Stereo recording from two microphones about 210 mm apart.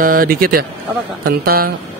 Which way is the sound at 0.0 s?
45° right (ahead or behind).